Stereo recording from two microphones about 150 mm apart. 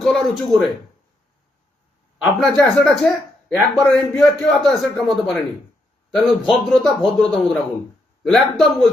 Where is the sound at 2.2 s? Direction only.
Centre (ahead or behind).